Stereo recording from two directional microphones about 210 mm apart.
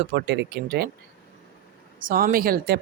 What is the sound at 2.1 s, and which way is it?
Speech, 40° right (ahead or behind).